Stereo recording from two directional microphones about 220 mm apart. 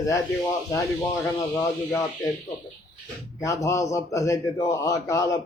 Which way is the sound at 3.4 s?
15° left (ahead or behind).